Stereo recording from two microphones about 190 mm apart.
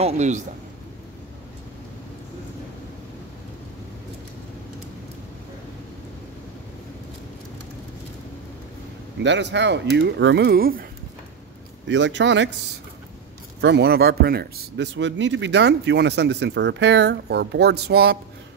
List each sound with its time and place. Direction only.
0.0 s a man's voice: 40° right (ahead or behind)
9.2 s a man's voice: 70° right (ahead or behind); by 10.9 s 50° right (ahead or behind)
11.9 s speech: 70° right (ahead or behind)
13.6 s a man's voice: 60° right (ahead or behind)